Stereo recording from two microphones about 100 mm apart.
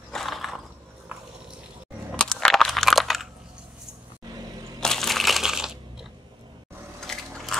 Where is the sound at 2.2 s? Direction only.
5° left (ahead or behind).